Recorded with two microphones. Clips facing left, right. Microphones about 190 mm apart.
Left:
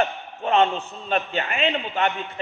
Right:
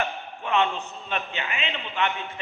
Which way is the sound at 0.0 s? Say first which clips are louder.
Left 5 dB; 40° left (ahead or behind).